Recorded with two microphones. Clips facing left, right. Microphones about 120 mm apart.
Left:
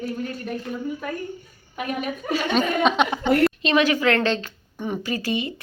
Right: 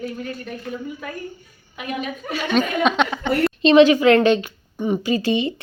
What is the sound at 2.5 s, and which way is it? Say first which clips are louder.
Speech: right 2 dB; centre (ahead or behind).